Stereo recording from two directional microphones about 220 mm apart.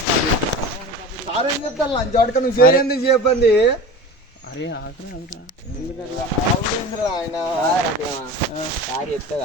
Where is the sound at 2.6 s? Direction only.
40° left (ahead or behind).